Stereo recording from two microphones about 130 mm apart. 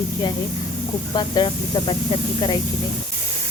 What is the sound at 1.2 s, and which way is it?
Speech, 40° left (ahead or behind).